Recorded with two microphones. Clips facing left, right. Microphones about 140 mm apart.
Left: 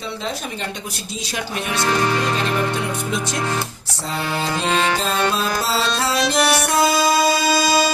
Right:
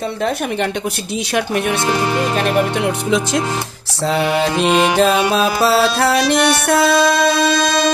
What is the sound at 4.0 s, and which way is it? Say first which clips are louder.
Music: right 9 dB; 70° right (ahead or behind).